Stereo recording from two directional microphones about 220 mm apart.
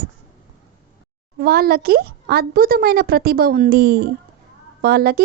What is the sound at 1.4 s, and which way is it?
A woman's voice, 45° right (ahead or behind).